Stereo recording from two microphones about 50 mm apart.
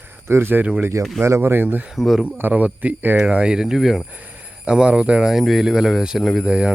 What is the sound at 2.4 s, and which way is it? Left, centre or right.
Speech, right.